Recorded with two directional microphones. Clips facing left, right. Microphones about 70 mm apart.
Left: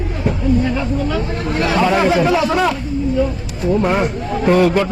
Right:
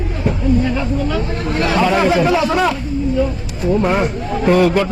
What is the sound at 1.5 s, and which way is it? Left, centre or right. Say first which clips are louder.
A man's voice: even; centre.